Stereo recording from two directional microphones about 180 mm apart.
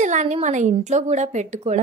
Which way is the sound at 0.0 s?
40° right (ahead or behind).